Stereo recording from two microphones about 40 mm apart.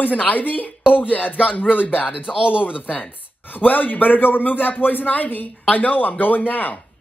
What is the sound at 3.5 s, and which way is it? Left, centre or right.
Speech, left.